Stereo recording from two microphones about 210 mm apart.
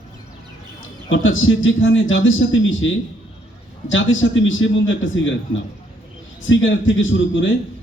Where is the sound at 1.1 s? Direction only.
65° left (ahead or behind).